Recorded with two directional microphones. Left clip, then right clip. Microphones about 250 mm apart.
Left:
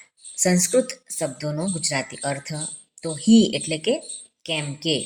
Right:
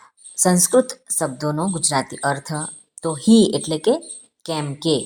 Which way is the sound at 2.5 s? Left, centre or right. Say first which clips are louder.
Right 5 dB; centre.